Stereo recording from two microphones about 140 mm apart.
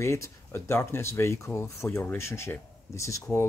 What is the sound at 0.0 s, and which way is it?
Speech, 20° left (ahead or behind).